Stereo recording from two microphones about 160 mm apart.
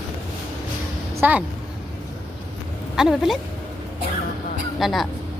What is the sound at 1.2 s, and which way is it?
Speech, 10° right (ahead or behind).